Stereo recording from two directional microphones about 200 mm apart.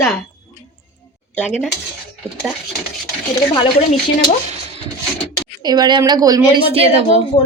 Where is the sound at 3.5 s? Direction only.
25° left (ahead or behind).